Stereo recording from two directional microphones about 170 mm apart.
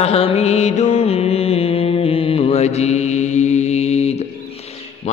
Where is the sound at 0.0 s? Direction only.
35° left (ahead or behind).